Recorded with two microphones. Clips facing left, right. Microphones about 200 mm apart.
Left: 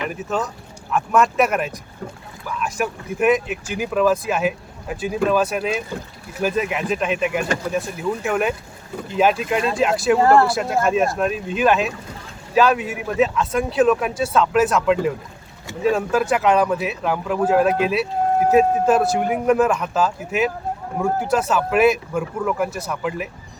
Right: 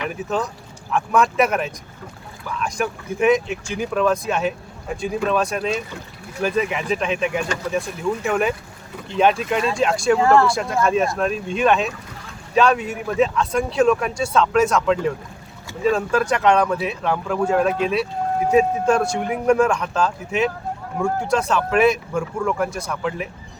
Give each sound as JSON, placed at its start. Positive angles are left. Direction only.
{"t": 0.1, "sound": "speech", "side_deg": 0}
{"t": 10.2, "sound": "speech", "side_deg": 40}
{"t": 10.4, "sound": "speech", "side_deg": 5}